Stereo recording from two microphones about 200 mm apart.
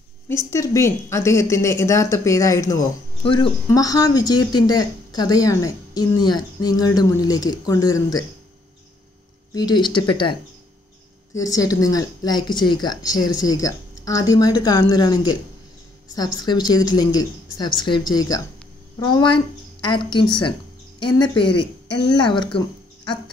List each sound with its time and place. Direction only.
0.3 s speech: 15° left (ahead or behind)
9.5 s speech: 20° left (ahead or behind)
11.3 s a woman's voice: 15° left (ahead or behind)